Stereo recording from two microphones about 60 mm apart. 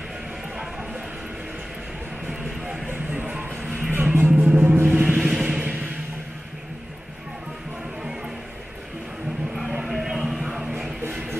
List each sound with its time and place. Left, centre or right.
3.9 s music: right; by 5.6 s centre
9.5 s music: centre